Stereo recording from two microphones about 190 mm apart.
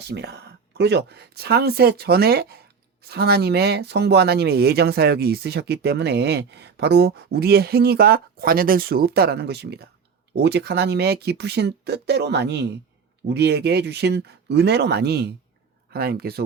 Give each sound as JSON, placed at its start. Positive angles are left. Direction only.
{"t": 0.1, "sound": "speech", "side_deg": -60}